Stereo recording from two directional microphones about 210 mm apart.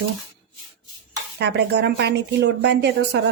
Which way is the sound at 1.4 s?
55° right (ahead or behind).